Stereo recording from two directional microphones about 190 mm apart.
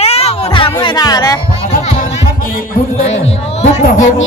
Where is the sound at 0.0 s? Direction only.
35° left (ahead or behind).